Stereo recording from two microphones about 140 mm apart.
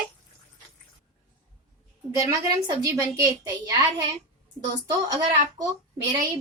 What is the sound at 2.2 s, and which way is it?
A woman's voice, 25° right (ahead or behind).